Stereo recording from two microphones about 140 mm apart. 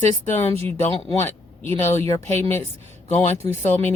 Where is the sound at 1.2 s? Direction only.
15° left (ahead or behind).